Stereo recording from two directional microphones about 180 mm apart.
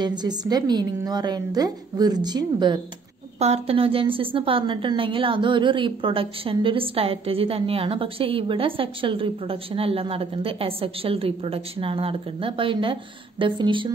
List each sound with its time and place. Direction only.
0.0 s a woman's voice: 25° right (ahead or behind)
3.3 s a woman's voice: 35° right (ahead or behind)